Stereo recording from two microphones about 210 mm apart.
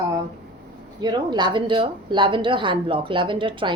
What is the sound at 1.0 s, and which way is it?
Speech, 20° right (ahead or behind).